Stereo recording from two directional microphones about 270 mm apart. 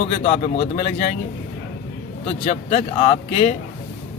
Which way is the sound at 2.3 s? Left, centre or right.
Left.